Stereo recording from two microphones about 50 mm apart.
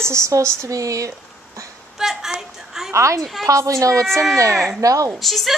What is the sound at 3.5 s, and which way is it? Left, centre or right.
A woman's voice, right.